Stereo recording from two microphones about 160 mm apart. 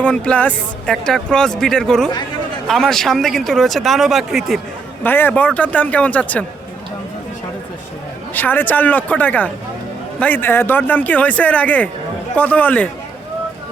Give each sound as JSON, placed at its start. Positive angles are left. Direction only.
{"t": 0.0, "sound": "speech", "side_deg": 5}
{"t": 5.0, "sound": "speech", "side_deg": 10}
{"t": 8.3, "sound": "speech", "side_deg": 10}